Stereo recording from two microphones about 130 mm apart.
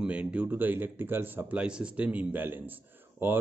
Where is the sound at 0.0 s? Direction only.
10° right (ahead or behind).